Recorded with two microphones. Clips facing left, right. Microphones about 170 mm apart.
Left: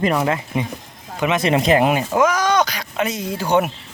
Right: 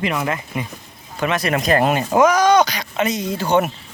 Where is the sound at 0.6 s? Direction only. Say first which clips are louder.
Left 4 dB; 20° left (ahead or behind).